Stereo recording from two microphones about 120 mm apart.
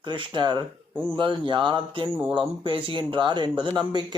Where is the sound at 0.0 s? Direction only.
40° right (ahead or behind).